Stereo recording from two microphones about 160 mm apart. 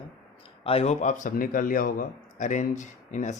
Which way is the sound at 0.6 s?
40° left (ahead or behind).